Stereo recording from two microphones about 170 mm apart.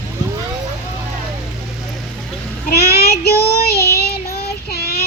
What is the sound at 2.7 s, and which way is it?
Child singing, 70° left (ahead or behind).